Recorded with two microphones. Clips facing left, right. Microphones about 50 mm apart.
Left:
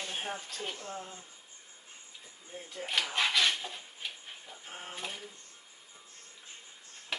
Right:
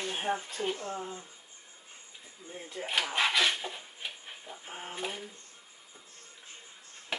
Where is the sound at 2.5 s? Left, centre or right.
Centre.